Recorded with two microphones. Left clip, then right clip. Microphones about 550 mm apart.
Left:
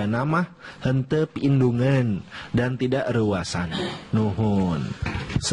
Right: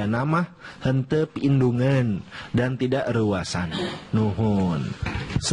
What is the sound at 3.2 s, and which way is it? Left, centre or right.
Speech, left.